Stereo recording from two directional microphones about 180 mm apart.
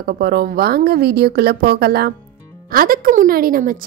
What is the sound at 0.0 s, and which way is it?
A woman's voice, 60° right (ahead or behind).